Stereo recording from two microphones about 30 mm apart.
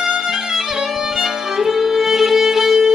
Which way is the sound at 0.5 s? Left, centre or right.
Centre.